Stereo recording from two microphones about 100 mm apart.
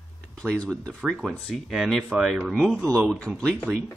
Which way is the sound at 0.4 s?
5° left (ahead or behind).